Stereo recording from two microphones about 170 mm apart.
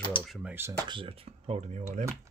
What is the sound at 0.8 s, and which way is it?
Speech, 30° right (ahead or behind).